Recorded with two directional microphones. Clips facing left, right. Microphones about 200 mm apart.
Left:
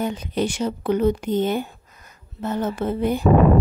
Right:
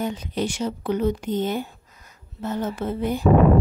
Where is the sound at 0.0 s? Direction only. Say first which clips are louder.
Left 2 dB; 60° left (ahead or behind).